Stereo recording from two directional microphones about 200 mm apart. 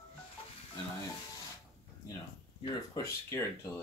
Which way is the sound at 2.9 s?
15° left (ahead or behind).